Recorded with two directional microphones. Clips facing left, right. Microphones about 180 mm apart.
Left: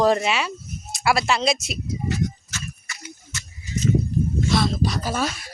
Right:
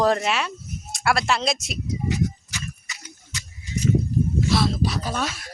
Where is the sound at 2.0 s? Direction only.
15° right (ahead or behind).